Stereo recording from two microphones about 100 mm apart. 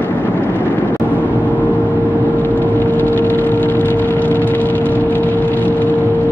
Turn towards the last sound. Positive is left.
turn(degrees=15)  # may be behind; listen again after turning